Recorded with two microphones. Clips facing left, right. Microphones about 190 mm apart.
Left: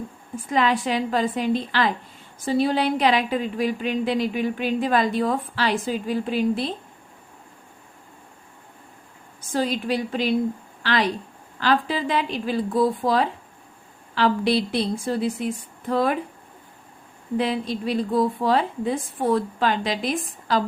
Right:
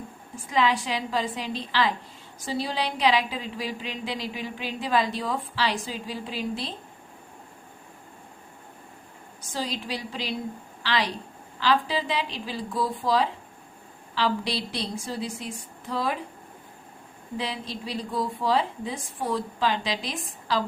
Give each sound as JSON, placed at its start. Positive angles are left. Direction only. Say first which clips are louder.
{"t": 0.4, "sound": "a woman's voice", "louder": "left 3 dB", "side_deg": 50}
{"t": 9.5, "sound": "a woman's voice", "louder": "left 8 dB", "side_deg": 55}
{"t": 17.3, "sound": "a woman's voice", "louder": "left 9 dB", "side_deg": 55}